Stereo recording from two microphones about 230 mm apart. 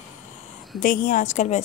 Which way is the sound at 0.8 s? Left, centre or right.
Left.